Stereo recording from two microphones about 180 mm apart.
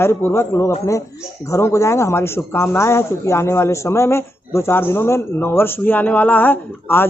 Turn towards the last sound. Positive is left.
turn(degrees=10)  # may be behind; listen again after turning